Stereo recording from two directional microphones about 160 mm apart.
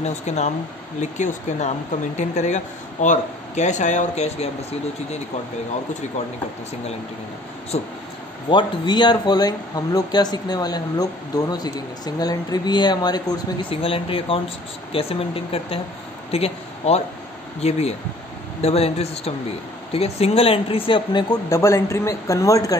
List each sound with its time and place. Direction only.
0.0 s speech: 45° left (ahead or behind)
7.7 s speech: 40° left (ahead or behind)
8.5 s speech: 30° left (ahead or behind)